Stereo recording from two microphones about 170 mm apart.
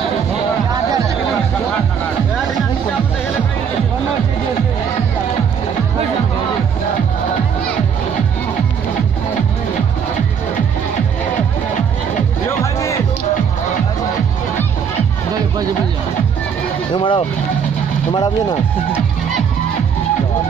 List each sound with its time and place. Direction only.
12.4 s music: 15° left (ahead or behind)
16.9 s vehicle: 30° left (ahead or behind)
18.1 s music: 25° left (ahead or behind)